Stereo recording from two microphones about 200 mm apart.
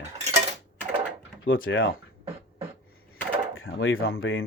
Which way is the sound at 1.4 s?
80° left.